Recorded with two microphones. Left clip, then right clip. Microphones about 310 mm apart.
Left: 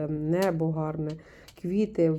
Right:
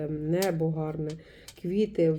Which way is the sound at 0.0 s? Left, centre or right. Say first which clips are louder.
Left 2 dB; centre.